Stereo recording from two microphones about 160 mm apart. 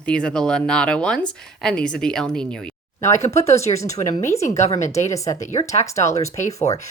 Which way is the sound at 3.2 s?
40° left (ahead or behind).